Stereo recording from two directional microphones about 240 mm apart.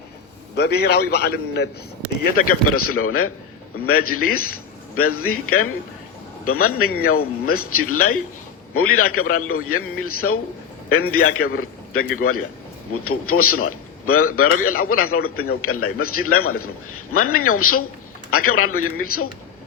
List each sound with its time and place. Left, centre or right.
0.5 s a man's voice: left
2.6 s a man's voice: left
12.9 s a man's voice: left